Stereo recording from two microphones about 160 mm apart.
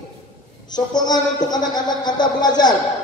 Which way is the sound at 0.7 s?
25° left (ahead or behind).